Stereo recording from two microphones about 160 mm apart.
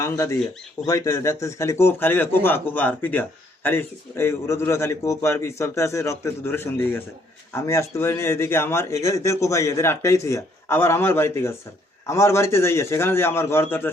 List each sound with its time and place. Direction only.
0.0 s a man's voice: 20° left (ahead or behind)